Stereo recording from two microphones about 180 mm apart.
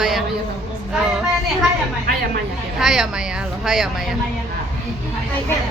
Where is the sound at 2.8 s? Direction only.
Centre (ahead or behind).